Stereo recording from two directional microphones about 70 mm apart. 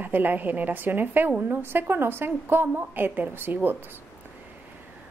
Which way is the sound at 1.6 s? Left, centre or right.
Right.